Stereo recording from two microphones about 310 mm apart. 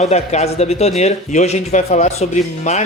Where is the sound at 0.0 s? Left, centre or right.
Left.